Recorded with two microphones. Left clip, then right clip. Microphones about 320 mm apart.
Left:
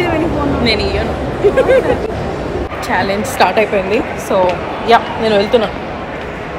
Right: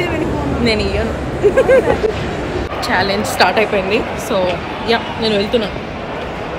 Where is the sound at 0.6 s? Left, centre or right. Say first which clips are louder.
Right 1 dB; centre.